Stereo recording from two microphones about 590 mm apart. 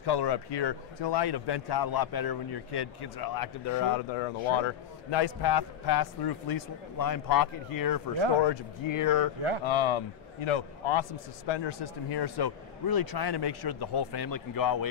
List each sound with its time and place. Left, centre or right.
0.0 s a man's voice: left
4.5 s a man's voice: left
9.7 s a man's voice: left